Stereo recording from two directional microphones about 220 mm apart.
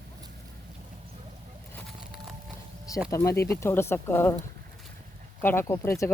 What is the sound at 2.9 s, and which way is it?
Speech, 15° left (ahead or behind).